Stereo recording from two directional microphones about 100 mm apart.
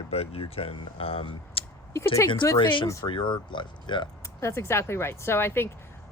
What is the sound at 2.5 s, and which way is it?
Speech, 55° left (ahead or behind).